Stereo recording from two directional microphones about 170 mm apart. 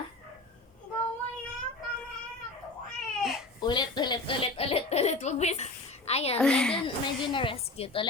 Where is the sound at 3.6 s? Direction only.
25° left (ahead or behind).